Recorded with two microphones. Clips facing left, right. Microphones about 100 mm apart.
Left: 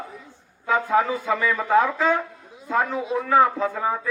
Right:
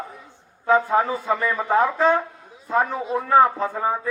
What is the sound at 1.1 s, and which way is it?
A man's voice, 40° right (ahead or behind).